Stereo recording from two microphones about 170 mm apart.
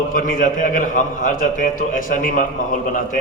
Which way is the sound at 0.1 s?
55° left (ahead or behind).